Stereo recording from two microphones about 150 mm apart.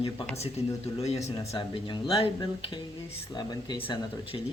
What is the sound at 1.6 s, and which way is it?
Speech, 35° left (ahead or behind).